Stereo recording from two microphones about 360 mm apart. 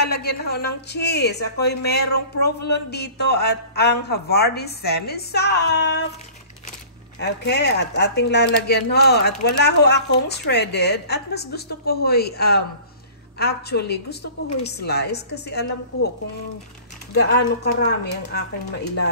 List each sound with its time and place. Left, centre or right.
0.0 s speech: left
7.2 s speech: left
17.1 s speech: left